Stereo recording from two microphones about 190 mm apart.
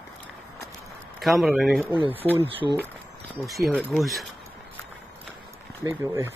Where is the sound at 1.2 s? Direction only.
Centre (ahead or behind).